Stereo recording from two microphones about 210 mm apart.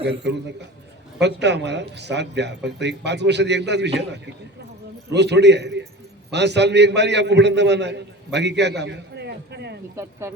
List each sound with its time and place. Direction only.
0.0 s a man's voice: 50° right (ahead or behind)
9.9 s speech: 15° right (ahead or behind)